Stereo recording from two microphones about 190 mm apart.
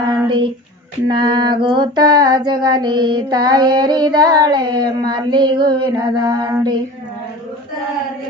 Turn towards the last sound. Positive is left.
turn(degrees=-20)  # may be behind; listen again after turning